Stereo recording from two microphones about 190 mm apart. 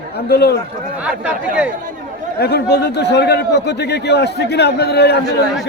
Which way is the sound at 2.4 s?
60° left (ahead or behind).